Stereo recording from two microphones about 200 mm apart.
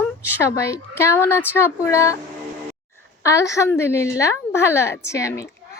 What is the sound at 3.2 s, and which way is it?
A woman's voice, 15° left (ahead or behind).